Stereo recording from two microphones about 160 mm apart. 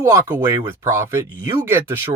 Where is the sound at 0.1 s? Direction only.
15° right (ahead or behind).